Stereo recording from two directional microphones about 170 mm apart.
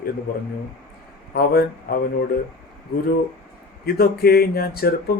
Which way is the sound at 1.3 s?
65° left (ahead or behind).